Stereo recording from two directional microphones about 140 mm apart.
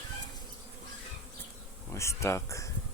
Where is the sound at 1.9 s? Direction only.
20° left (ahead or behind).